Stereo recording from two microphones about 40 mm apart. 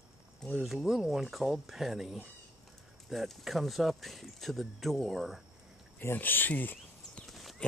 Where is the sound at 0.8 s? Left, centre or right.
Centre.